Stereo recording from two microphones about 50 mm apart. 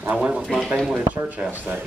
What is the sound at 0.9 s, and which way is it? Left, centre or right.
Speech, right.